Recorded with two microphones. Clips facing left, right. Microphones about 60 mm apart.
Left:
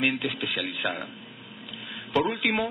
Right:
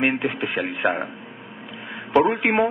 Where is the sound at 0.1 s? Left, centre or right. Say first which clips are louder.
Right 5 dB; right.